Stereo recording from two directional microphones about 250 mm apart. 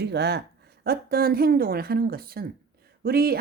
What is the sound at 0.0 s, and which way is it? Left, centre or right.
A woman's voice, right.